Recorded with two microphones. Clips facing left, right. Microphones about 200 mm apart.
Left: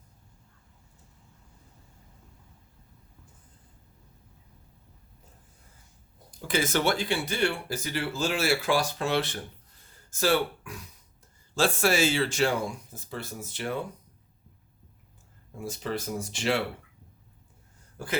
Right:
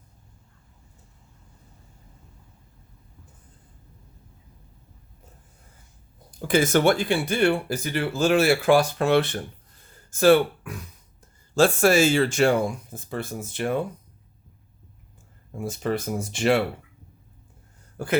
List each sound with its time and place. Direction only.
6.5 s speech: 50° right (ahead or behind)
15.5 s speech: 55° right (ahead or behind)
18.0 s speech: 55° right (ahead or behind)